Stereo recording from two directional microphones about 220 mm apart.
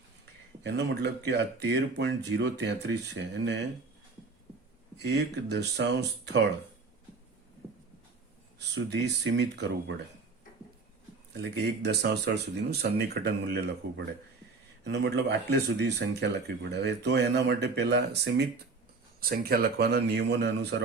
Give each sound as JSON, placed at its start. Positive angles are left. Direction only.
{"t": 0.6, "sound": "speech", "side_deg": -50}
{"t": 4.9, "sound": "speech", "side_deg": -50}
{"t": 8.5, "sound": "speech", "side_deg": -50}
{"t": 11.5, "sound": "speech", "side_deg": -50}